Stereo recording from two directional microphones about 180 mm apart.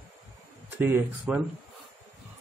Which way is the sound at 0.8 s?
10° right (ahead or behind).